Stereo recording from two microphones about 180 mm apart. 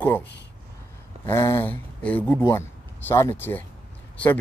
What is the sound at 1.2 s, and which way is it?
Speech, 15° left (ahead or behind).